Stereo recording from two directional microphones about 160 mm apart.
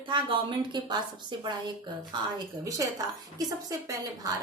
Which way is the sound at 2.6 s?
25° right (ahead or behind).